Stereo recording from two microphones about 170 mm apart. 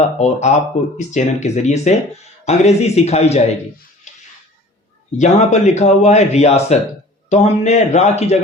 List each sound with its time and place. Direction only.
0.0 s speech: 40° left (ahead or behind)
5.1 s speech: 45° left (ahead or behind)